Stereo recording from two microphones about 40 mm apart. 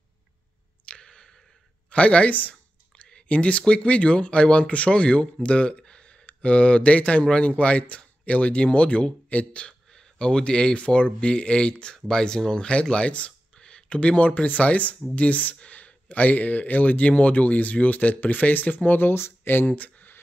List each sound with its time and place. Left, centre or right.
0.8 s a sound: left
1.9 s speech: left
3.1 s a sound: left
3.3 s speech: left
12.9 s speech: left
18.9 s speech: left
19.7 s speech: left